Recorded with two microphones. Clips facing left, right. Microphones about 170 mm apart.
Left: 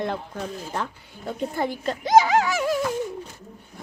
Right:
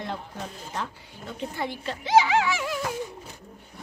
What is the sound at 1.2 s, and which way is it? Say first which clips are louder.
Speech: left 5 dB; 45° left (ahead or behind).